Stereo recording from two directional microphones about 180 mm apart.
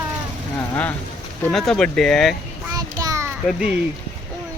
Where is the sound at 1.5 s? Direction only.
Centre (ahead or behind).